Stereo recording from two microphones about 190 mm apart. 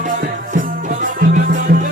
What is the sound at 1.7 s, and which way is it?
Music, 45° right (ahead or behind).